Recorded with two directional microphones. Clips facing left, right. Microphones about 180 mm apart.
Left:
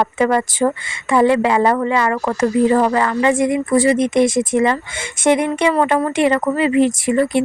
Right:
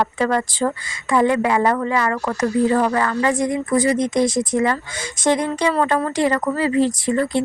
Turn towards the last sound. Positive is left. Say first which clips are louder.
# left 3 dB
turn(degrees=20)  # may be behind; listen again after turning